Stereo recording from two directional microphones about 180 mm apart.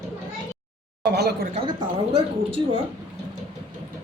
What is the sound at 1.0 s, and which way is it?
Speech, 65° right (ahead or behind).